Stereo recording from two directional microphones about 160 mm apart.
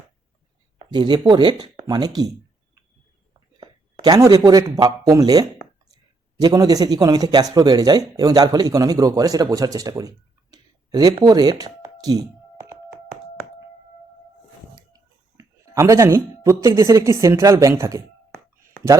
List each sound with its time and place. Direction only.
0.9 s speech: 25° right (ahead or behind)
3.6 s speech: 25° right (ahead or behind)
14.9 s speech: 20° right (ahead or behind)